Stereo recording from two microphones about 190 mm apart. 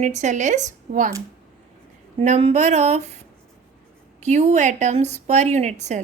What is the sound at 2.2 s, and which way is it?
A woman's voice, 35° right (ahead or behind).